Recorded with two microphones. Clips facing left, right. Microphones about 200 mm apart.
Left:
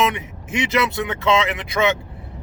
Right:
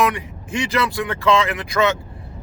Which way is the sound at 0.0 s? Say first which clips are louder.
Right 1 dB; 20° left (ahead or behind).